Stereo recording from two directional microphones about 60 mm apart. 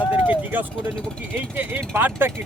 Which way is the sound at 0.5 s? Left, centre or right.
Right.